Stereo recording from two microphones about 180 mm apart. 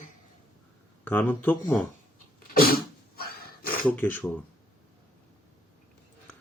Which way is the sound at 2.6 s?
55° left (ahead or behind).